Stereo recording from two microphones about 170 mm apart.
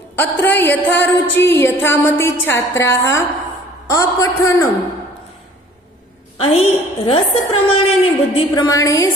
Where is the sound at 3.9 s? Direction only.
20° left (ahead or behind).